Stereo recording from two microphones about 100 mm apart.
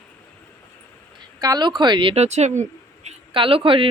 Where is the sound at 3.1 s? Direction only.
65° right (ahead or behind).